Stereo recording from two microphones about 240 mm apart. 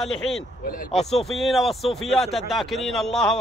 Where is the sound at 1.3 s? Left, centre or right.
Centre.